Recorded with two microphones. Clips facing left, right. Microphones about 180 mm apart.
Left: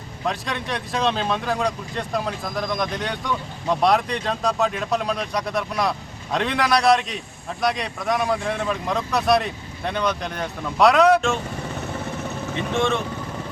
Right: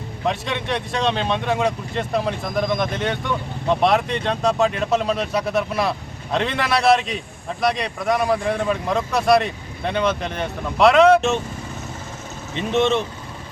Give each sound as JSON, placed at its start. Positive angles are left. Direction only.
{"t": 0.3, "sound": "speech", "side_deg": 0}
{"t": 12.7, "sound": "speech", "side_deg": -20}